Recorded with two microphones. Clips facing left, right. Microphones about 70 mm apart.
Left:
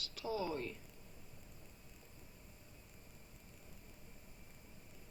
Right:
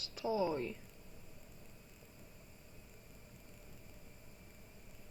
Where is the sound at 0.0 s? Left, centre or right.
Right.